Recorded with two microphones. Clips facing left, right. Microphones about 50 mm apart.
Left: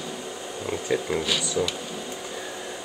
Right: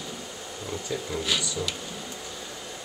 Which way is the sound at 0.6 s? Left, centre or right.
Left.